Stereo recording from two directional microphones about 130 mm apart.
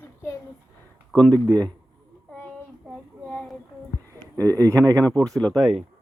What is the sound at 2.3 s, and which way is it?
Child singing, 10° left (ahead or behind).